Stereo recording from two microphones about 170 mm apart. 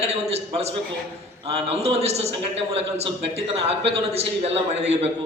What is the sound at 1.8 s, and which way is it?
Speech, 40° right (ahead or behind).